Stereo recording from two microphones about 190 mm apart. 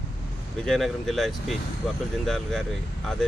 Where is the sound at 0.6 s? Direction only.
Centre (ahead or behind).